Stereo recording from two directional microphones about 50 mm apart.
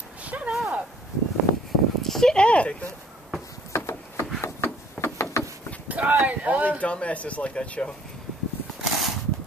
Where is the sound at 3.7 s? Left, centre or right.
Left.